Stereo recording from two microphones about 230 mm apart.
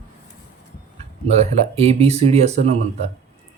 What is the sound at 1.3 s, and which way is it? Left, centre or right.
Speech, right.